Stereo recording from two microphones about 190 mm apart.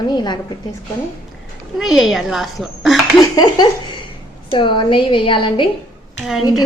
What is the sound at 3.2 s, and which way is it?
A woman's voice, 20° left (ahead or behind).